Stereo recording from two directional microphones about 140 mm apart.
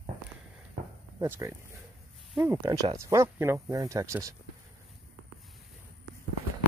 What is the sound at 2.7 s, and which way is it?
Speech, 25° right (ahead or behind).